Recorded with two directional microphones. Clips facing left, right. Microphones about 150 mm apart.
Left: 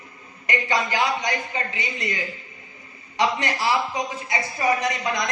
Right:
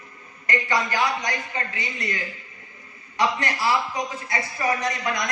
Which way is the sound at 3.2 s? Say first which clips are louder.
Left 1 dB; 20° left (ahead or behind).